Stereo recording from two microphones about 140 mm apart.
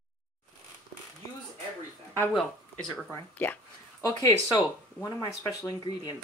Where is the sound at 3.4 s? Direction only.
15° left (ahead or behind).